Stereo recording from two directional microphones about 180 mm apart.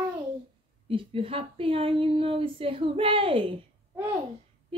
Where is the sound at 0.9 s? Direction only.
30° right (ahead or behind).